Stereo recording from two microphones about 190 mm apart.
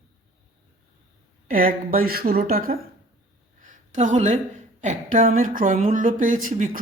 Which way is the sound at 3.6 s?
40° right (ahead or behind).